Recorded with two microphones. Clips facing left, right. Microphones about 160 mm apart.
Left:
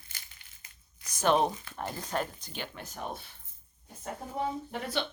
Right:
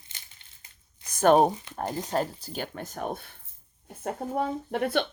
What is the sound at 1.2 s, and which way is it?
Speech, 45° right (ahead or behind).